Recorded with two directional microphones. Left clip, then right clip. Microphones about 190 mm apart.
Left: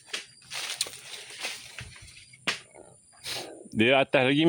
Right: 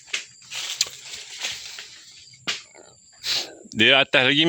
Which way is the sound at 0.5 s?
5° left (ahead or behind).